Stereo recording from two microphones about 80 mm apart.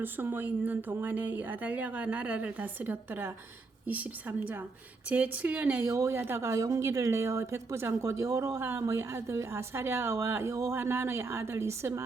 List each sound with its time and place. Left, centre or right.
0.0 s speech: right
5.8 s speech: right